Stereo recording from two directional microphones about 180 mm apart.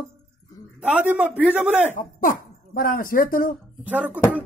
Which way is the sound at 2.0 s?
50° left (ahead or behind).